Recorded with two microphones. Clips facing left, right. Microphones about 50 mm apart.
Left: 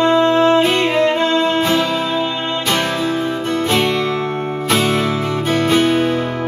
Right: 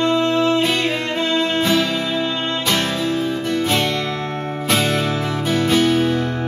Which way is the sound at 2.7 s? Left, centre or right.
Centre.